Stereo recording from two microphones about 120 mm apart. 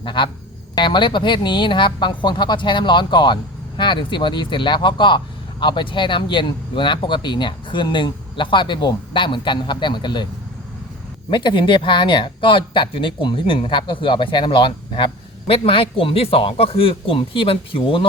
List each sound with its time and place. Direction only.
0.0 s speech: 40° left (ahead or behind)
11.3 s speech: 40° left (ahead or behind)